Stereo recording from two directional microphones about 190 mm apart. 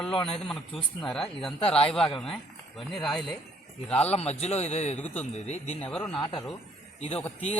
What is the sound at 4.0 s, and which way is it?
A man's voice, 35° left (ahead or behind).